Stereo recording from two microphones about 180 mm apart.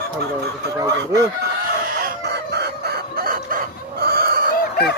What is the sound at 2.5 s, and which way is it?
Chicken, 60° right (ahead or behind).